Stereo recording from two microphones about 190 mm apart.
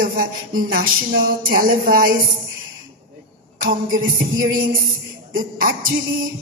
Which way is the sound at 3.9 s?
50° right (ahead or behind).